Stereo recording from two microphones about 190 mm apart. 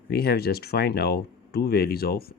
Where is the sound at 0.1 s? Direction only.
55° left (ahead or behind).